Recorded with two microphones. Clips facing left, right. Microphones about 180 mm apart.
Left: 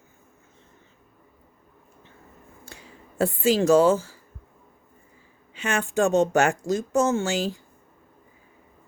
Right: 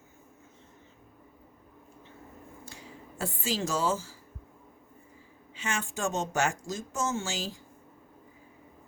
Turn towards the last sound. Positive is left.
turn(degrees=60)  # may be behind; listen again after turning